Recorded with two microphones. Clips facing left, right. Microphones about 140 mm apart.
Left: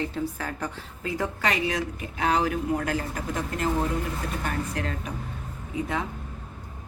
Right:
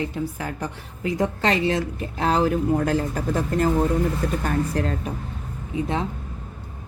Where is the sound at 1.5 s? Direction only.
30° right (ahead or behind).